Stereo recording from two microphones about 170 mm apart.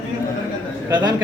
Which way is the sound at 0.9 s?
25° right (ahead or behind).